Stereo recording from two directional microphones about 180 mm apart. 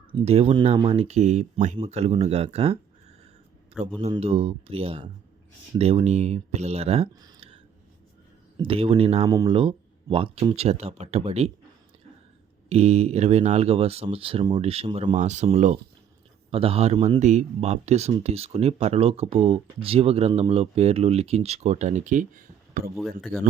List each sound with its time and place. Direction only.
0.1 s speech: 30° right (ahead or behind)
4.0 s speech: 35° right (ahead or behind)
7.2 s a sound: 25° right (ahead or behind)
8.5 s speech: 30° right (ahead or behind)
12.6 s speech: 35° right (ahead or behind)
15.1 s speech: 40° right (ahead or behind)